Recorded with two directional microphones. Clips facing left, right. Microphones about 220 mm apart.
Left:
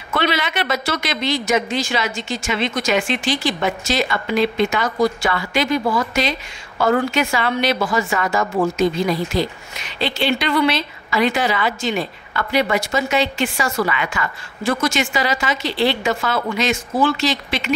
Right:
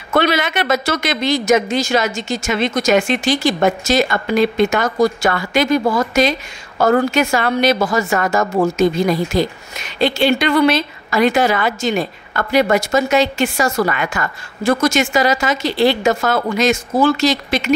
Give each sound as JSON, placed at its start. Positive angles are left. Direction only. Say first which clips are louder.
{"t": 0.1, "sound": "a woman's voice", "louder": "right 5 dB", "side_deg": -45}